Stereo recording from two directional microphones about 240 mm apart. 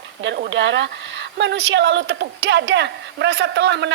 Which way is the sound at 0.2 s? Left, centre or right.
Right.